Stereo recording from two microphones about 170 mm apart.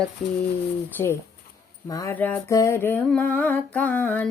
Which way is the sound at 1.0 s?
20° left (ahead or behind).